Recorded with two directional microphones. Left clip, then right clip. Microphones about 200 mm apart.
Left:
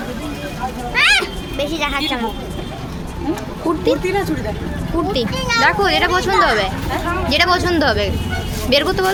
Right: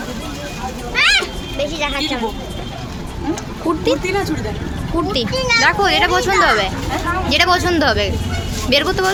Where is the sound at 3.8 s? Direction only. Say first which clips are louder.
Left 1 dB; centre (ahead or behind).